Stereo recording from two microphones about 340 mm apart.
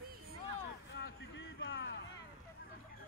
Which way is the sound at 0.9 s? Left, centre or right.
Left.